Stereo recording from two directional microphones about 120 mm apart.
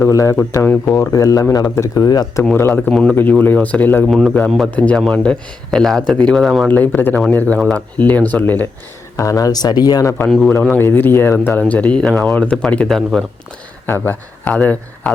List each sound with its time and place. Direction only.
0.0 s speech: 25° left (ahead or behind)
1.1 s speech: 30° left (ahead or behind)
2.6 s a man's voice: 15° left (ahead or behind); by 6.7 s centre (ahead or behind)
6.7 s speech: 15° left (ahead or behind)
9.1 s speech: 30° left (ahead or behind)
10.2 s a man's voice: 5° left (ahead or behind)
10.6 s speech: 15° left (ahead or behind)
13.8 s speech: 15° left (ahead or behind)